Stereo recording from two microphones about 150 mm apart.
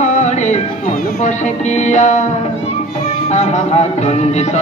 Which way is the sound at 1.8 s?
50° left (ahead or behind).